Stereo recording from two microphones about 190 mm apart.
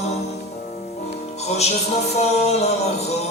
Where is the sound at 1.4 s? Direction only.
35° left (ahead or behind).